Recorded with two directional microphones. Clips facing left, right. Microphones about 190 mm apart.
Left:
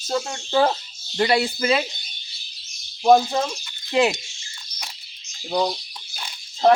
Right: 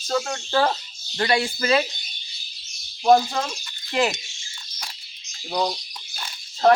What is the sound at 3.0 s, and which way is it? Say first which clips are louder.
Speech: left 1 dB; 5° left (ahead or behind).